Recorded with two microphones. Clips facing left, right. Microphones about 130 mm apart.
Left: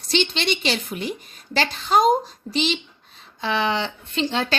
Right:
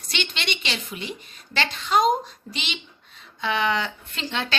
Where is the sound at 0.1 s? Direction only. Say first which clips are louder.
Left 8 dB; 35° left (ahead or behind).